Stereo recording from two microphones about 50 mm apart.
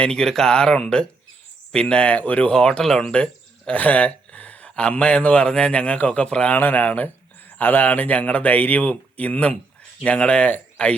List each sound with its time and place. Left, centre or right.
0.0 s a man's voice: centre; by 2.5 s left
2.5 s speech: centre
3.7 s a sound: left
4.7 s a man's voice: centre
6.5 s speech: left